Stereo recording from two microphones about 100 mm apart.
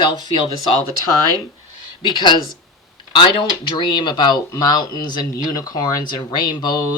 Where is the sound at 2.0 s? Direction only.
50° left (ahead or behind).